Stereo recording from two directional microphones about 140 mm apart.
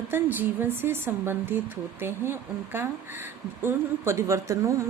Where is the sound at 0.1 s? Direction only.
15° right (ahead or behind).